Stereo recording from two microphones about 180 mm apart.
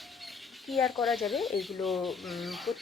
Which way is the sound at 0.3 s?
Centre (ahead or behind).